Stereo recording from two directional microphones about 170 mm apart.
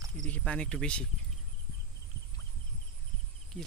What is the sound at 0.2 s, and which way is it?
Speech, 5° left (ahead or behind).